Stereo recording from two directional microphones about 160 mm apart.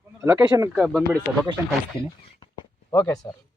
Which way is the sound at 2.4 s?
25° left (ahead or behind).